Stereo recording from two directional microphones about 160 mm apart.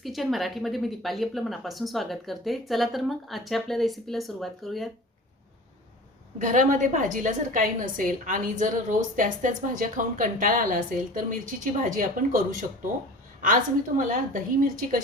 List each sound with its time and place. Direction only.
0.0 s speech: centre (ahead or behind)
6.4 s a woman's voice: 55° right (ahead or behind)
14.0 s a woman's voice: 55° right (ahead or behind)